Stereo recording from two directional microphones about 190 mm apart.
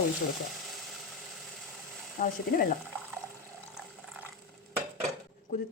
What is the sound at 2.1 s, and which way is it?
Speech, 45° left (ahead or behind).